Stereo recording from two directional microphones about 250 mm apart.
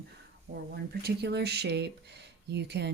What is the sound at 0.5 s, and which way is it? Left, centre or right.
Speech, right.